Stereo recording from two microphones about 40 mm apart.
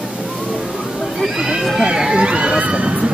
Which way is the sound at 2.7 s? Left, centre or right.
Right.